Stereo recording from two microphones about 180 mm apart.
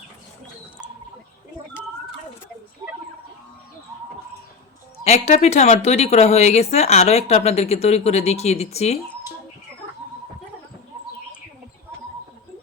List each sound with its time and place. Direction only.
5.0 s speech: 35° left (ahead or behind)